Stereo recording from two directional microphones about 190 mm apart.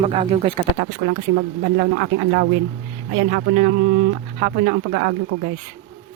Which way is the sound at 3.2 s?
50° right (ahead or behind).